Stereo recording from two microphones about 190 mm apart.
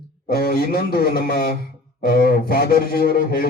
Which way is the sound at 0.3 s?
55° left (ahead or behind).